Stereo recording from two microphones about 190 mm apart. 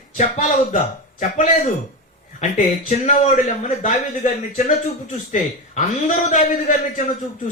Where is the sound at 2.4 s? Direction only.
35° left (ahead or behind).